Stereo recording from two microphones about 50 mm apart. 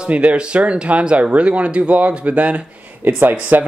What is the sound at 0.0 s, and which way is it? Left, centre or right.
Speech, right.